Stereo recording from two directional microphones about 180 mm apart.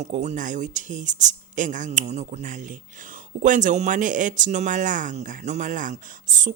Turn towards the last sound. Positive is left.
turn(degrees=-45)  # may be behind; listen again after turning